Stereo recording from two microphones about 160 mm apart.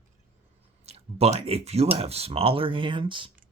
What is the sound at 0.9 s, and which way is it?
Speech, 40° right (ahead or behind).